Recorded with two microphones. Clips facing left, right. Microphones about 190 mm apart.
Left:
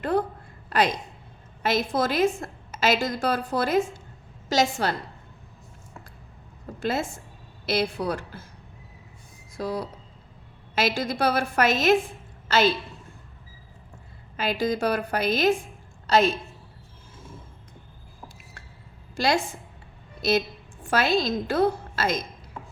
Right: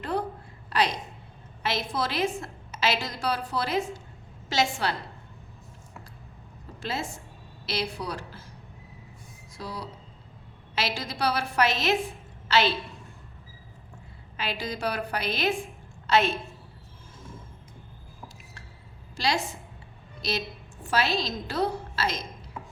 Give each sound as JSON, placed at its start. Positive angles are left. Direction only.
{"t": 0.0, "sound": "a sound", "side_deg": 50}
{"t": 0.7, "sound": "a woman's voice", "side_deg": 50}
{"t": 6.7, "sound": "a woman's voice", "side_deg": 50}
{"t": 9.6, "sound": "a woman's voice", "side_deg": 50}
{"t": 14.3, "sound": "a woman's voice", "side_deg": 45}
{"t": 19.1, "sound": "a woman's voice", "side_deg": 50}